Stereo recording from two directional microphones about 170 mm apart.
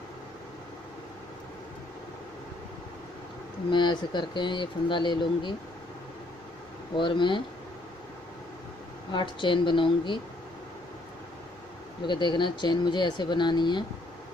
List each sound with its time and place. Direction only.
3.7 s speech: 25° left (ahead or behind)
7.0 s speech: 30° left (ahead or behind)
9.1 s speech: 30° left (ahead or behind)
12.1 s speech: 25° left (ahead or behind)